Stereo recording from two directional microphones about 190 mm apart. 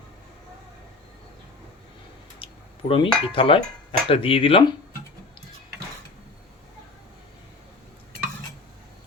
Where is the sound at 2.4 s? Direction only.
30° left (ahead or behind).